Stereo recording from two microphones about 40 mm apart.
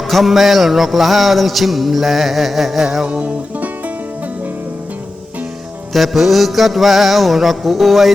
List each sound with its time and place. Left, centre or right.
0.1 s music: centre
3.1 s music: right
5.9 s music: centre